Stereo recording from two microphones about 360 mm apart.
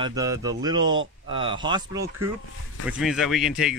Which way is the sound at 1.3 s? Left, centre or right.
Centre.